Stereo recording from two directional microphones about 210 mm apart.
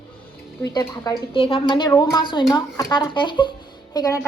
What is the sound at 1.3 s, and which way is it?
A woman's voice, 25° left (ahead or behind).